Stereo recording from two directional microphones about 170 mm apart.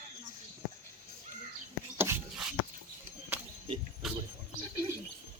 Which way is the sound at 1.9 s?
15° right (ahead or behind).